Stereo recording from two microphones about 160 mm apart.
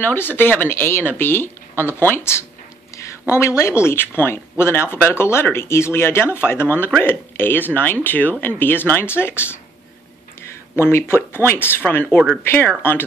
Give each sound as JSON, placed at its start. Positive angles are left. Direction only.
{"t": 0.0, "sound": "speech", "side_deg": 15}